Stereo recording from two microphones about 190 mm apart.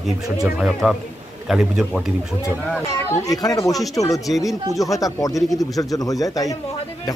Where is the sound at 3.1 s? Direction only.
20° left (ahead or behind).